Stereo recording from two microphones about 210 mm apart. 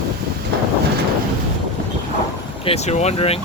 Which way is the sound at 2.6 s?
30° left (ahead or behind).